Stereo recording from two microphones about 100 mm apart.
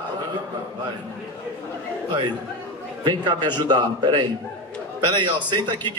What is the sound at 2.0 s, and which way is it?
A man's voice, 50° right (ahead or behind).